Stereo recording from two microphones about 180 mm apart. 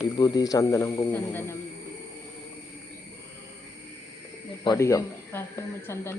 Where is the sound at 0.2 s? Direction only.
25° left (ahead or behind).